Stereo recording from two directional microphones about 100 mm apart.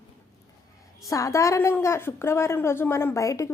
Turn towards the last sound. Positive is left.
turn(degrees=35)  # may be behind; listen again after turning